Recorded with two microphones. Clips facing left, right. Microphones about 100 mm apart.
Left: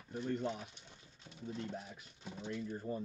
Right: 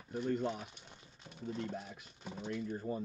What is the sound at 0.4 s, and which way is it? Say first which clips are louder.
Speech: right 2 dB; 50° right (ahead or behind).